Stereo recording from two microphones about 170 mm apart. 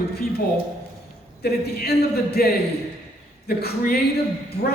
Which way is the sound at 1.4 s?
65° left (ahead or behind).